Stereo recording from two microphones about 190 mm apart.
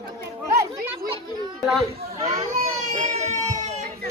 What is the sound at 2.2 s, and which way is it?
Baby cry, 35° right (ahead or behind).